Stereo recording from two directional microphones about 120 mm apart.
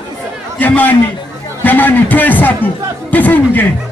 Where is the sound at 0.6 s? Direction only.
15° left (ahead or behind).